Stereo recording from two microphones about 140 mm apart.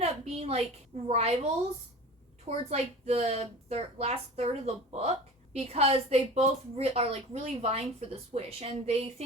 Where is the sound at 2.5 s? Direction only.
50° right (ahead or behind).